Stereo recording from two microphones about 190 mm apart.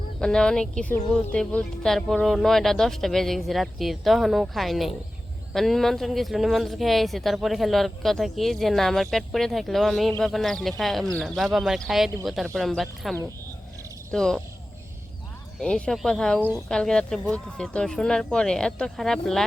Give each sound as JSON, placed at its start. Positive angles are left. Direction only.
{"t": 0.2, "sound": "speech", "side_deg": 5}
{"t": 15.6, "sound": "speech", "side_deg": 5}
{"t": 16.4, "sound": "speech", "side_deg": -10}
{"t": 16.6, "sound": "speech", "side_deg": 5}